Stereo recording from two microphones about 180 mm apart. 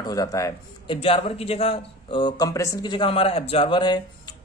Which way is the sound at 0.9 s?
30° left (ahead or behind).